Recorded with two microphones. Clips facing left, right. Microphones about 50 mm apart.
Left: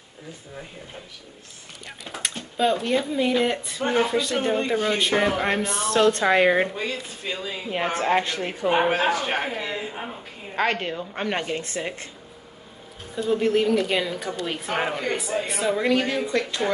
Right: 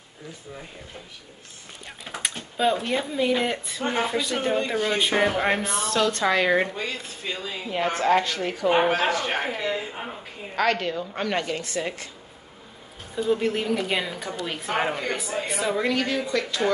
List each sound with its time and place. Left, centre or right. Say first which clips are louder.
2.0 s speech: even; centre
5.9 s a woman's voice: left 4 dB; left
6.6 s speech: left 2 dB; centre
7.9 s a woman's voice: right 1 dB; left
8.6 s speech: even; centre
10.5 s a woman's voice: right 1 dB; left
13.1 s speech: left 2 dB; centre
16.0 s speech: left 1 dB; centre
16.3 s speech: right 1 dB; left